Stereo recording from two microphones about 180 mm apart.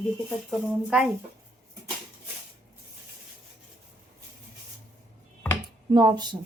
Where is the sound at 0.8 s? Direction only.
5° right (ahead or behind).